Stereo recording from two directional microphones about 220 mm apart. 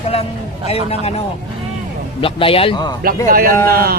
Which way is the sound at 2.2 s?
25° left (ahead or behind).